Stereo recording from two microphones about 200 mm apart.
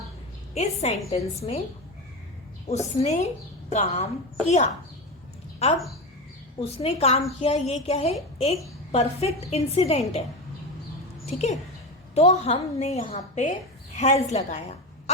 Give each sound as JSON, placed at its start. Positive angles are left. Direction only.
{"t": 0.5, "sound": "speech", "side_deg": 30}
{"t": 2.6, "sound": "speech", "side_deg": 30}
{"t": 11.3, "sound": "speech", "side_deg": 30}